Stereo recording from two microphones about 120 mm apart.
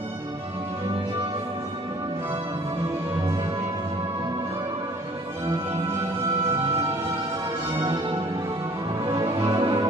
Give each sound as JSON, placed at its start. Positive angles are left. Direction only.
{"t": 9.0, "sound": "music", "side_deg": -35}